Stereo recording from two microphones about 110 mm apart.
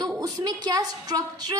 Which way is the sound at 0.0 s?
40° right (ahead or behind).